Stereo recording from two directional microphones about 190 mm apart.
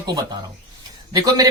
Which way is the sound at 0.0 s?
20° right (ahead or behind).